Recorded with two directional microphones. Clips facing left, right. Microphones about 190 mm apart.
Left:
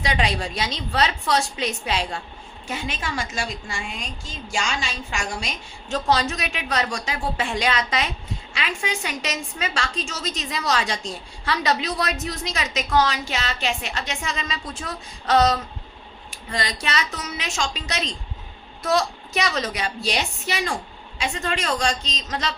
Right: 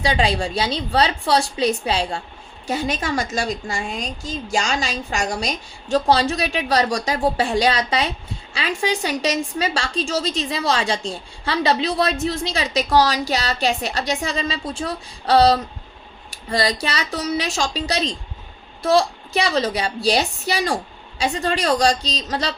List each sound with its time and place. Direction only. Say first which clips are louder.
0.0 s a woman's voice: right 4 dB; 30° right (ahead or behind)